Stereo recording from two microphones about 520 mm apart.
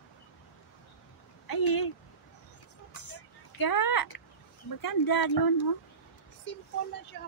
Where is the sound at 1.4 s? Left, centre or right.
Left.